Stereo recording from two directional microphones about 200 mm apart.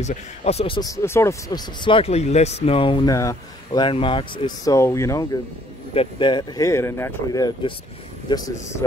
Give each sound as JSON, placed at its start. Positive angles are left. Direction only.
{"t": 0.0, "sound": "speech", "side_deg": 35}